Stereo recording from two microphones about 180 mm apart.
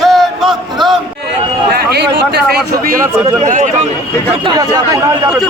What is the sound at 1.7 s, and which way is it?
Speech, 60° right (ahead or behind).